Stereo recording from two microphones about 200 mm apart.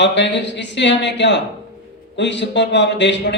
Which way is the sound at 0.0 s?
60° left (ahead or behind).